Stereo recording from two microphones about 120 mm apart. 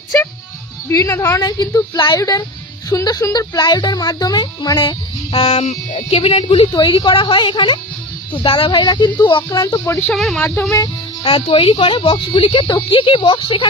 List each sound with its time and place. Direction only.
0.8 s speech: 25° left (ahead or behind)
1.4 s a woman's voice: 35° left (ahead or behind); by 6.7 s 50° left (ahead or behind)
6.7 s a woman's voice: 35° left (ahead or behind)
9.8 s speech: 20° left (ahead or behind)
10.1 s speech: centre (ahead or behind)
11.2 s a woman's voice: 55° left (ahead or behind)
12.4 s a woman's voice: 50° left (ahead or behind)
12.6 s a woman's voice: 40° left (ahead or behind)